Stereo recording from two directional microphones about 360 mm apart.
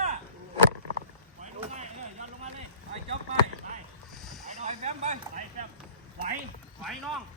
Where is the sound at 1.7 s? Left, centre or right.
Centre.